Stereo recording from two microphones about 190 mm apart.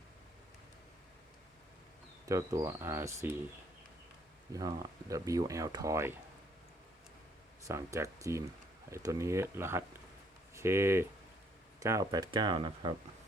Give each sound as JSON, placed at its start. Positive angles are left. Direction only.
{"t": 2.2, "sound": "speech", "side_deg": -15}
{"t": 4.5, "sound": "speech", "side_deg": -20}
{"t": 7.7, "sound": "speech", "side_deg": -15}